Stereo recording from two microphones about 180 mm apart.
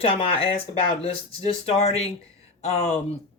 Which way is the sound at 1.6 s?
35° left (ahead or behind).